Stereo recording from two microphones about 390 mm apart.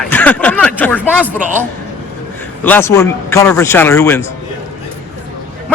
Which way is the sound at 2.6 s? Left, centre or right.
Centre.